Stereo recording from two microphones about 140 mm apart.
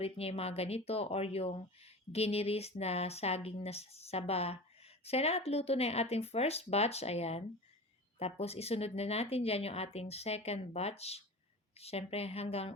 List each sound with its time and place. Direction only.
0.0 s speech: 45° left (ahead or behind)